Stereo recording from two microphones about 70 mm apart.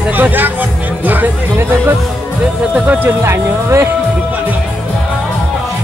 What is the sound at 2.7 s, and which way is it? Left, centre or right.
Music, right.